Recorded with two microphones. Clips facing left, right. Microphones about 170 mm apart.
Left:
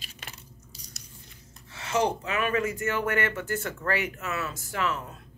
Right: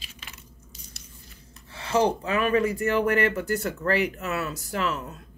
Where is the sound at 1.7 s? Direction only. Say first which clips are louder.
Right 3 dB; 30° right (ahead or behind).